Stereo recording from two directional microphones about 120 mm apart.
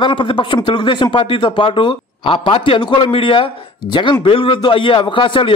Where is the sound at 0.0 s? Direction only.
40° left (ahead or behind).